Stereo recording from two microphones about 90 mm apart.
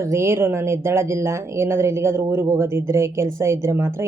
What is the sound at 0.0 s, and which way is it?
A woman's voice, 30° right (ahead or behind).